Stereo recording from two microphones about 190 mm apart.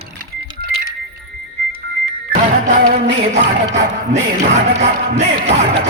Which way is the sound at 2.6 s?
45° right (ahead or behind).